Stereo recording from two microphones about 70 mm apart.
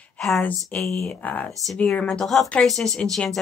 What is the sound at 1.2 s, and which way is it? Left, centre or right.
Speech, left.